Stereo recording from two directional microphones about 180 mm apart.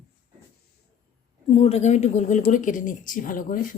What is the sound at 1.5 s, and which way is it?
A woman's voice, 35° left (ahead or behind).